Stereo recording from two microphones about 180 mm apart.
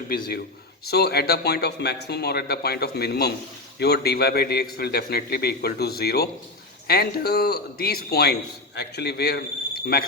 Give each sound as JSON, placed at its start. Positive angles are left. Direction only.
{"t": 0.9, "sound": "a man's voice", "side_deg": 60}